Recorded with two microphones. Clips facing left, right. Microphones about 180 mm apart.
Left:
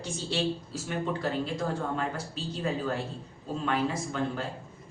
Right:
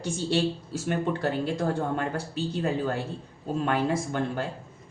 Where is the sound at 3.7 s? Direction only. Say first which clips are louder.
Right 2 dB; 60° right (ahead or behind).